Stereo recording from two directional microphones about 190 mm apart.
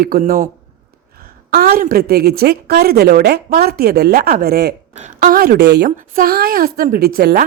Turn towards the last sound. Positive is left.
turn(degrees=-50)  # may be behind; listen again after turning